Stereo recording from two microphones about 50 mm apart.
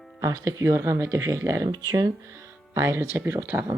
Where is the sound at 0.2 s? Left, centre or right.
Right.